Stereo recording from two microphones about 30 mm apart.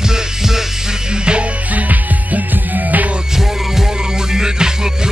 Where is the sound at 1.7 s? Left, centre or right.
Right.